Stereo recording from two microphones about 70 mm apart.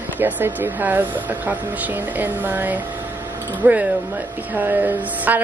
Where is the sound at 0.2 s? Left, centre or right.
Right.